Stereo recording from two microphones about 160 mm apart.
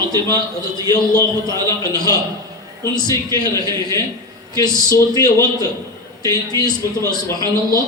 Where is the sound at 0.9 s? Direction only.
25° left (ahead or behind).